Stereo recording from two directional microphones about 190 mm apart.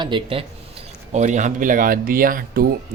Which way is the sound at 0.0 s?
25° right (ahead or behind).